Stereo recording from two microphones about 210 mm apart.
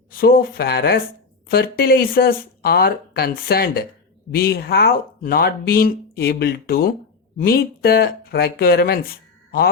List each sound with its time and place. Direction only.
0.1 s speech: 45° left (ahead or behind)